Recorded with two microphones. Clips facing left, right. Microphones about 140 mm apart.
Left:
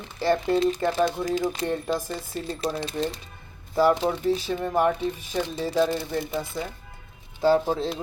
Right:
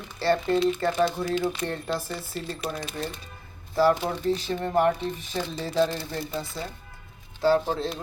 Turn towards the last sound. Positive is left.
turn(degrees=15)  # may be behind; listen again after turning